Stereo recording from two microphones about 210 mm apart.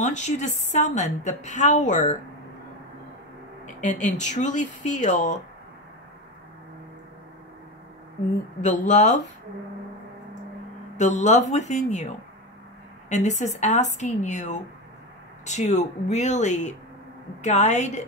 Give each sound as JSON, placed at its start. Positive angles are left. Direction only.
{"t": 0.0, "sound": "a woman's voice", "side_deg": 35}
{"t": 3.6, "sound": "a woman's voice", "side_deg": 35}
{"t": 8.6, "sound": "a woman's voice", "side_deg": 35}
{"t": 11.0, "sound": "a woman's voice", "side_deg": 35}
{"t": 13.1, "sound": "a woman's voice", "side_deg": 35}